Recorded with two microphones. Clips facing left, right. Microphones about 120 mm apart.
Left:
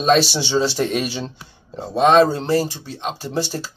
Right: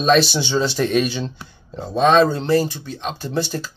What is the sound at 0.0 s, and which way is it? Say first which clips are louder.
Speech: even; 30° left (ahead or behind).